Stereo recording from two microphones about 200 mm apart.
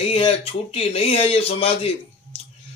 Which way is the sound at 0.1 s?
30° left (ahead or behind).